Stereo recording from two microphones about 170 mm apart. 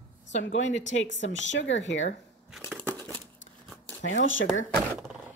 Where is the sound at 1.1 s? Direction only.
90° left.